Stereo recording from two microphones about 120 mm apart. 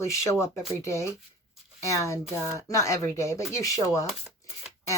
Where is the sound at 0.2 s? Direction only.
25° left (ahead or behind).